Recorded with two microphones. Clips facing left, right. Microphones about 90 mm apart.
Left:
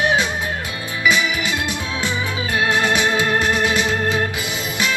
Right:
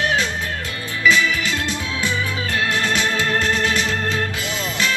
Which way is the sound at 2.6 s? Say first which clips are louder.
Left 4 dB; 20° left (ahead or behind).